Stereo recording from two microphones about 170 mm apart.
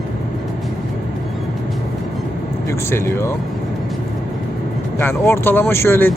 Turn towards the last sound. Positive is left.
turn(degrees=15)  # may be behind; listen again after turning